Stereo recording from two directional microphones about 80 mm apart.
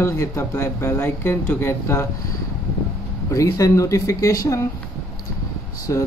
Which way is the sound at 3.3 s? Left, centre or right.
Left.